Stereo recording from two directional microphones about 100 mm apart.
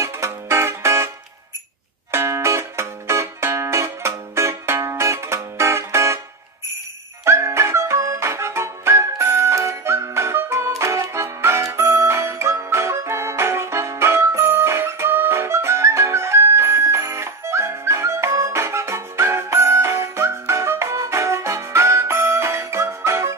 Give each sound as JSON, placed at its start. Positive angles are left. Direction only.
{"t": 0.0, "sound": "music", "side_deg": -30}
{"t": 7.2, "sound": "music", "side_deg": -25}